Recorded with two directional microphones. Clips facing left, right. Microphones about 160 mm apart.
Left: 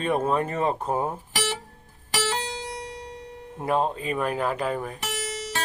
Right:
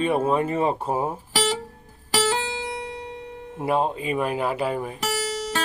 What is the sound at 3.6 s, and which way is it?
Speech, 5° right (ahead or behind).